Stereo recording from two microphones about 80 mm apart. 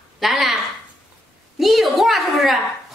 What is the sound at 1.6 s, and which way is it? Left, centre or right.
A woman's voice, centre.